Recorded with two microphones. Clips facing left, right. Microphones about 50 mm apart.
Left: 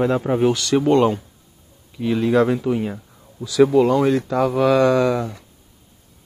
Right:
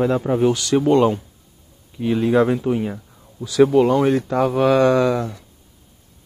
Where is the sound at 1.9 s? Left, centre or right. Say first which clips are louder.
Even; centre.